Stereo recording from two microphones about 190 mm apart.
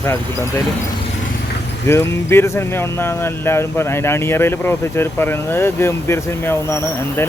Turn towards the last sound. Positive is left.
turn(degrees=15)  # may be behind; listen again after turning